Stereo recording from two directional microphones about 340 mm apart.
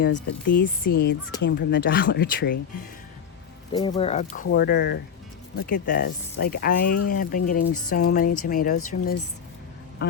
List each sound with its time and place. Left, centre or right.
0.0 s speech: left
3.7 s speech: centre
10.0 s duck: left